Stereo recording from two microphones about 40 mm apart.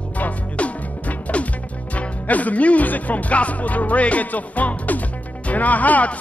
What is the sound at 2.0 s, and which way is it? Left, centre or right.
Speech, left.